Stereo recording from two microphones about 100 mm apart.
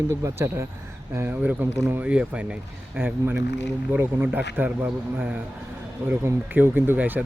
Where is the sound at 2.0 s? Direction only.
10° right (ahead or behind).